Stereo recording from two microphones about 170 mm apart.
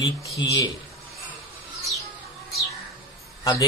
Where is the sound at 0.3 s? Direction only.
20° left (ahead or behind).